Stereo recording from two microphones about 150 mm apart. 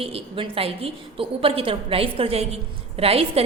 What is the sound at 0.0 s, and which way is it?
A woman's voice, 40° right (ahead or behind).